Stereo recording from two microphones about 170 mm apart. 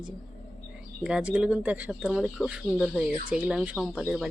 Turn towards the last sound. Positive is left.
turn(degrees=-5)  # may be behind; listen again after turning